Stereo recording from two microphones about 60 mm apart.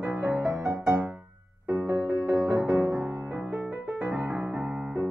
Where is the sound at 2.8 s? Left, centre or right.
Right.